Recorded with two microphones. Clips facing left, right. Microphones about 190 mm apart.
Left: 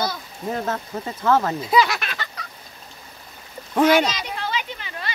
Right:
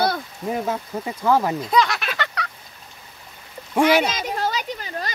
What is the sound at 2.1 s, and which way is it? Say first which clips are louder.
Fowl: right 7 dB; 70° right (ahead or behind).